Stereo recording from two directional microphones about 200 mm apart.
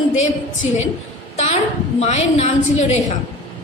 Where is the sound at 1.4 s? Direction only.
35° left (ahead or behind).